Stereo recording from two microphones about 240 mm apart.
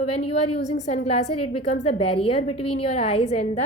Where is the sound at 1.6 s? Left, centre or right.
Left.